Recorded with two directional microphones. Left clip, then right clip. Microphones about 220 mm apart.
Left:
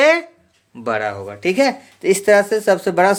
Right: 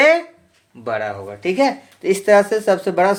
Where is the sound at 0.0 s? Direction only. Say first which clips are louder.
Even; 35° left (ahead or behind).